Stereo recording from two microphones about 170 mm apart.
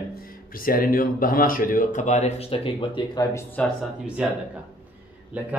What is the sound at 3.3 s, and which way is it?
Speech, 10° left (ahead or behind).